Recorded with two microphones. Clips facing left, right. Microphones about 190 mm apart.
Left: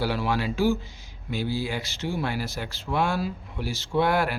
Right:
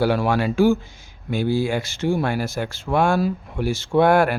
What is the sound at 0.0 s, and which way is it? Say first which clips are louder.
Speech: right 7 dB; 50° right (ahead or behind).